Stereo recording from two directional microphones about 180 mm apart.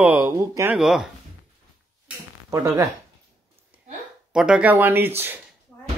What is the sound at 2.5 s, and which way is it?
Speech, 20° right (ahead or behind).